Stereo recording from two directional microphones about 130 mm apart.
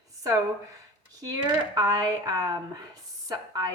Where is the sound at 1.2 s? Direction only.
30° right (ahead or behind).